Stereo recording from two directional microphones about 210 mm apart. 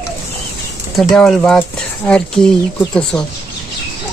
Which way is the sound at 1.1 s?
5° left (ahead or behind).